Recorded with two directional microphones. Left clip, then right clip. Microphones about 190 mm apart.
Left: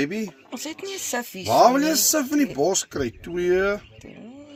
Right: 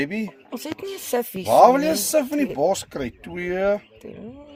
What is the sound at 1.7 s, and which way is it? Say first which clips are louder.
Speech: right 1 dB; 30° right (ahead or behind).